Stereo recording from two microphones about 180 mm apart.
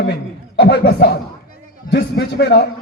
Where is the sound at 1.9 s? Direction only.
65° left (ahead or behind).